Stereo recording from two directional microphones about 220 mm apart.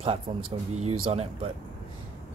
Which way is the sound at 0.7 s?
25° right (ahead or behind).